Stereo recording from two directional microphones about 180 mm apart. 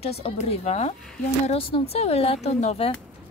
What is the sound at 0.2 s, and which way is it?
Speech, 35° left (ahead or behind).